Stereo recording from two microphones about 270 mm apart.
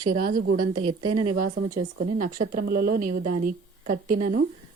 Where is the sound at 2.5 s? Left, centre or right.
Right.